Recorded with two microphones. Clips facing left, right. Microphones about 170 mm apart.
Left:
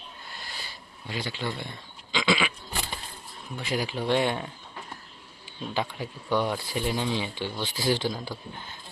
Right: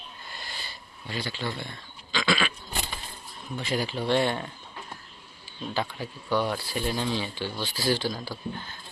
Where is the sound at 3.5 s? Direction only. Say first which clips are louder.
Right 1 dB; 10° left (ahead or behind).